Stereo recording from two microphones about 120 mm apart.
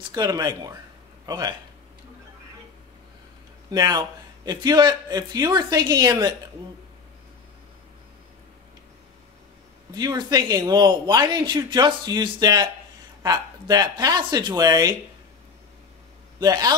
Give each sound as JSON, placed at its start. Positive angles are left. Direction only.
{"t": 0.1, "sound": "a man's voice", "side_deg": -35}
{"t": 3.7, "sound": "a man's voice", "side_deg": -30}
{"t": 9.9, "sound": "a man's voice", "side_deg": -35}
{"t": 16.3, "sound": "a man's voice", "side_deg": -35}